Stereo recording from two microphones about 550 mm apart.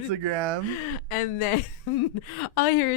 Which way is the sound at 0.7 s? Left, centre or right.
Left.